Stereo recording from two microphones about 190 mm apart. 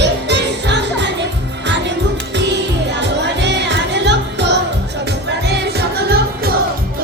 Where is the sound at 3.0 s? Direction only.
65° right (ahead or behind).